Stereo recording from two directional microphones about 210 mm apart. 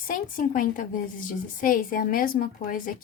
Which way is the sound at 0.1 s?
40° left (ahead or behind).